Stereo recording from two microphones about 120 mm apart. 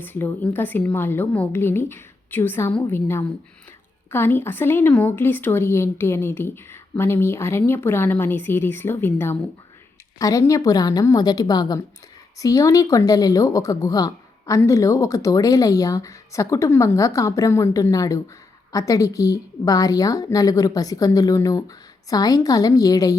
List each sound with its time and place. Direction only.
0.0 s a woman's voice: 15° left (ahead or behind)